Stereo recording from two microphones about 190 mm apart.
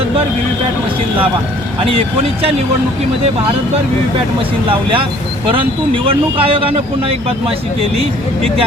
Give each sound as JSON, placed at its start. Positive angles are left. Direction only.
{"t": 6.1, "sound": "speech", "side_deg": -30}